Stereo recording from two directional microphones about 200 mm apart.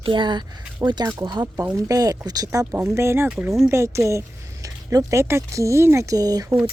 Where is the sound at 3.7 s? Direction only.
15° right (ahead or behind).